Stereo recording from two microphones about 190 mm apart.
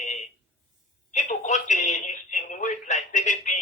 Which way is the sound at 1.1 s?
40° left (ahead or behind).